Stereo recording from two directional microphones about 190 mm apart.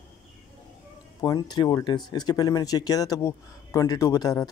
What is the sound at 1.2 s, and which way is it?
Speech, 20° left (ahead or behind).